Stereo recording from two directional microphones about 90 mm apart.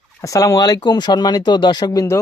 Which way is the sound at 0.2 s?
35° left (ahead or behind).